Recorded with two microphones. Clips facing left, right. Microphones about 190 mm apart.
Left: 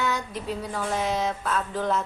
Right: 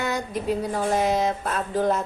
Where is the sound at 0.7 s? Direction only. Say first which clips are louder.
Right 3 dB; 40° right (ahead or behind).